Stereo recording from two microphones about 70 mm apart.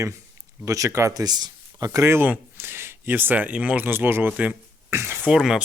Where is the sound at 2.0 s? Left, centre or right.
Right.